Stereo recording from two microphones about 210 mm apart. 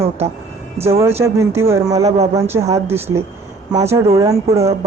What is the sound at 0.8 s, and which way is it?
Speech, 30° right (ahead or behind).